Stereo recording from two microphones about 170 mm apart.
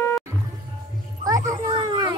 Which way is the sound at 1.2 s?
20° right (ahead or behind).